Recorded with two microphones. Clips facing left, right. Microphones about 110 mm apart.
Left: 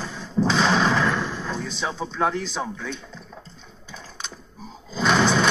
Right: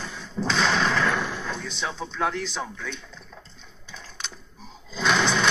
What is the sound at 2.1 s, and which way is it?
Speech, 35° left (ahead or behind).